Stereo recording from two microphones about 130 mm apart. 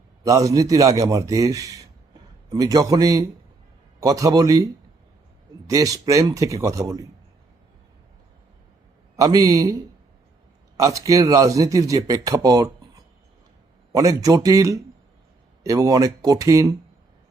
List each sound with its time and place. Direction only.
0.2 s speech: 25° right (ahead or behind)
9.1 s speech: 25° right (ahead or behind)
10.8 s speech: 25° right (ahead or behind)
13.9 s speech: 25° right (ahead or behind)